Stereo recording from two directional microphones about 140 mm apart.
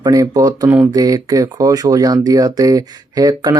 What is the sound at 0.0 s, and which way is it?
Speech, 25° right (ahead or behind).